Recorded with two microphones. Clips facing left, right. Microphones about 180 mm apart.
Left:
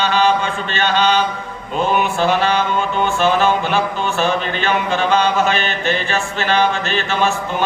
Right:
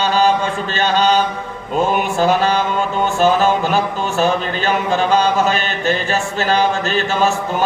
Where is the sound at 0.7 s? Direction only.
40° right (ahead or behind).